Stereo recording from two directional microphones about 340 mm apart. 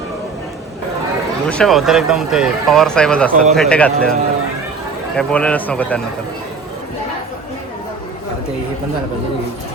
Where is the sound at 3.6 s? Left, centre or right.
Centre.